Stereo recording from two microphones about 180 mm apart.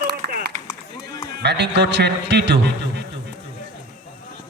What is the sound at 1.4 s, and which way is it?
A man's voice, 70° right (ahead or behind).